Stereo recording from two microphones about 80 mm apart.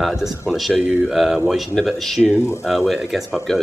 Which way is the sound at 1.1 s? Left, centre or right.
Centre.